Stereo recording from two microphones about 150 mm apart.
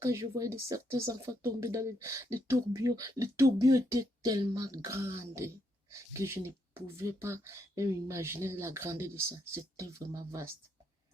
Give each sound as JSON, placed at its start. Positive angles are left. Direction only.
{"t": 0.0, "sound": "speech", "side_deg": -20}